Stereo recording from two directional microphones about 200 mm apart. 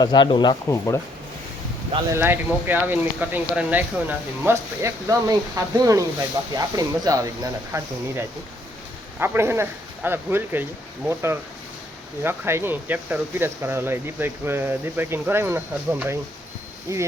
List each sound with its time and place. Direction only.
0.0 s speech: 20° left (ahead or behind)
2.1 s speech: 10° right (ahead or behind)